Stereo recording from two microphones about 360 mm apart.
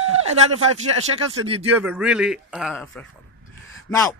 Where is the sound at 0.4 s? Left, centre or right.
Right.